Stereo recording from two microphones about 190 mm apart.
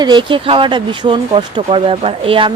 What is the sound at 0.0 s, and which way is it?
Speech, 25° right (ahead or behind).